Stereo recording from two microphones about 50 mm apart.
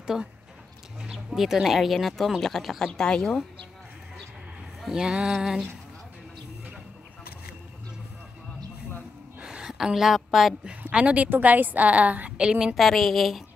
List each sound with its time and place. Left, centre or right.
0.0 s speech: centre
2.9 s speech: centre
4.8 s a woman's voice: centre
9.4 s a sound: centre
9.8 s a woman's voice: centre
10.9 s a woman's voice: right
11.2 s a woman's voice: right
12.4 s a woman's voice: centre
12.7 s a woman's voice: centre